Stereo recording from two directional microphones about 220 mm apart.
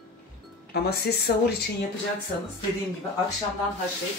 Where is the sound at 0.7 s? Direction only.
45° left (ahead or behind).